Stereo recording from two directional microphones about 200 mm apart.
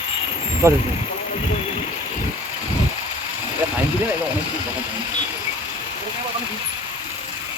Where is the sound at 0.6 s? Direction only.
15° right (ahead or behind).